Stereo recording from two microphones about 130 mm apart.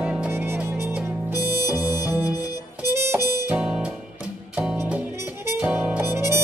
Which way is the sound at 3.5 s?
10° right (ahead or behind).